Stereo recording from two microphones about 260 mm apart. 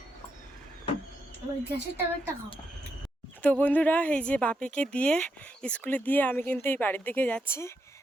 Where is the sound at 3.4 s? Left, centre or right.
Centre.